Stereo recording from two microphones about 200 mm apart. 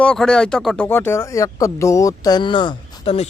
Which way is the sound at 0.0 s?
5° left (ahead or behind).